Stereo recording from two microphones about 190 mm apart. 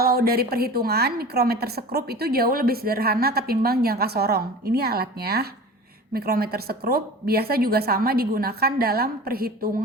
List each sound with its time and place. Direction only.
0.0 s a woman's voice: 55° right (ahead or behind)